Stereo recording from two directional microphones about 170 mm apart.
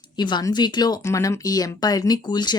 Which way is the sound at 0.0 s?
25° left (ahead or behind).